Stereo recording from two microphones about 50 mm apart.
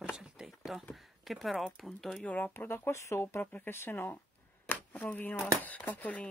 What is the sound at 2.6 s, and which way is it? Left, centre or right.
Speech, left.